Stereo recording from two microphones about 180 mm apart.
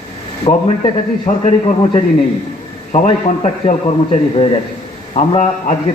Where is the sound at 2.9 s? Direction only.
40° left (ahead or behind).